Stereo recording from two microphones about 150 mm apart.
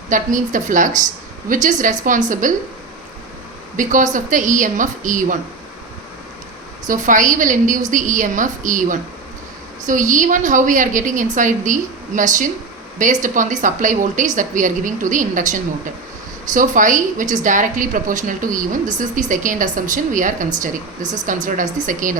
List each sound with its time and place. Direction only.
0.1 s a woman's voice: 60° right (ahead or behind)
3.8 s a woman's voice: 60° right (ahead or behind)
6.8 s a woman's voice: 60° right (ahead or behind)